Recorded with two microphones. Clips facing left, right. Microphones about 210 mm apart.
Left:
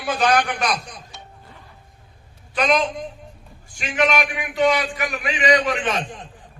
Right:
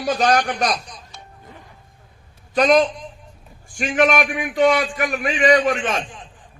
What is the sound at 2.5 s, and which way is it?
A man's voice, 45° right (ahead or behind).